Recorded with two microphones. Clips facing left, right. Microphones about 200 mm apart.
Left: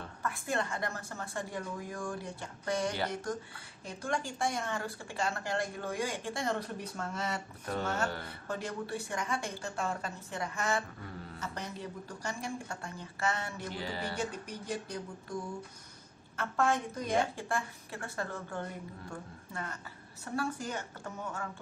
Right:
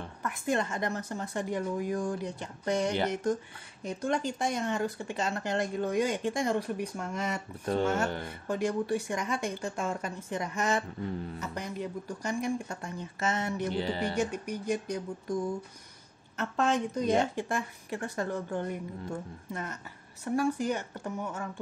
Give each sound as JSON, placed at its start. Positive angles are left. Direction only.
{"t": 0.0, "sound": "a woman's voice", "side_deg": -20}
{"t": 16.3, "sound": "a woman's voice", "side_deg": -20}